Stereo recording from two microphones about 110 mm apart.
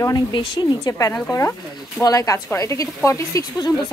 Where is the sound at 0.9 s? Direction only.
30° left (ahead or behind).